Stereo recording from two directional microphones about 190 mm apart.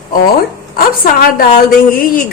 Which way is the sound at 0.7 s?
50° left (ahead or behind).